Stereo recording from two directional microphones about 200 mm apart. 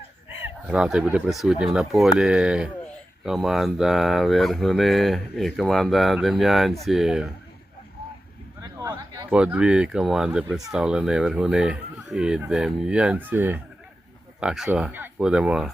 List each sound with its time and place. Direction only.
0.7 s speech: 5° right (ahead or behind)
8.8 s a sound: 15° right (ahead or behind)
9.3 s speech: 5° right (ahead or behind)